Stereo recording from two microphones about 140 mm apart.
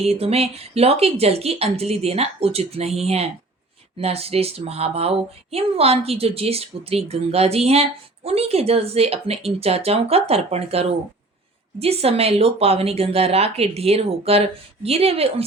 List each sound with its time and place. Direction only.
0.0 s speech: 45° right (ahead or behind)